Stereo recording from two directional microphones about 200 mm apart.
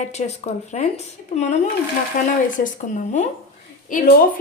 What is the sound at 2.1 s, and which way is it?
Speech, 45° left (ahead or behind).